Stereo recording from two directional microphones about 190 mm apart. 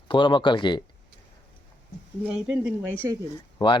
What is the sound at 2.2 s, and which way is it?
Speech, 5° right (ahead or behind).